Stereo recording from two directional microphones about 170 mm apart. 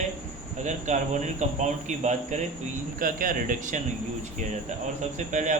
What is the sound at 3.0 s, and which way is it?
Speech, 55° right (ahead or behind).